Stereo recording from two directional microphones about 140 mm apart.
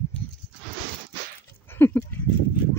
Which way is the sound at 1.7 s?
15° left (ahead or behind).